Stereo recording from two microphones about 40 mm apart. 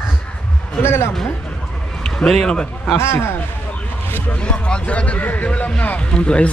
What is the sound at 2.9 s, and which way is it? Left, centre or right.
Speech, left.